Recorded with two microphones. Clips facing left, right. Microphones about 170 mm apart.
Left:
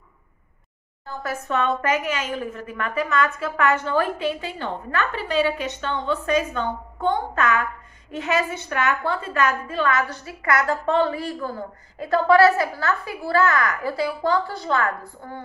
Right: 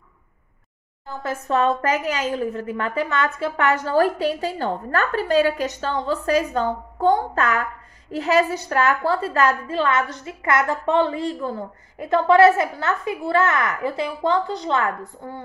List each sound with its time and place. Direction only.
1.5 s a woman's voice: 35° right (ahead or behind)